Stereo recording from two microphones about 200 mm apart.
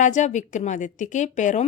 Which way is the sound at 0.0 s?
35° left (ahead or behind).